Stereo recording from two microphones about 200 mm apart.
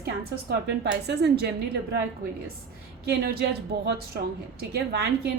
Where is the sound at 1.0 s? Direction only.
55° right (ahead or behind).